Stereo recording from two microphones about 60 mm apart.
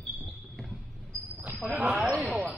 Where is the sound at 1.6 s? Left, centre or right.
Right.